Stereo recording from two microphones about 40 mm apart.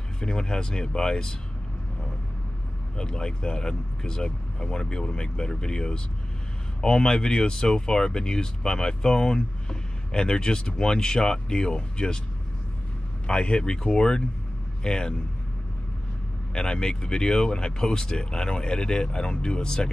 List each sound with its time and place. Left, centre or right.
0.2 s speech: centre
3.0 s speech: centre
13.3 s speech: left
16.5 s speech: left